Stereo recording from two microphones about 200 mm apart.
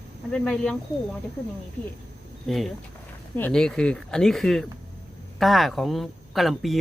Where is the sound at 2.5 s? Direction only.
Centre (ahead or behind).